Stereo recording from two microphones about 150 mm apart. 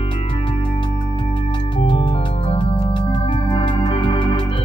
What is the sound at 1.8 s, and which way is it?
Music, 40° left (ahead or behind).